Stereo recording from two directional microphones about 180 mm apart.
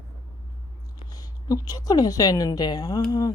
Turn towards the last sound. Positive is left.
turn(degrees=20)  # may be behind; listen again after turning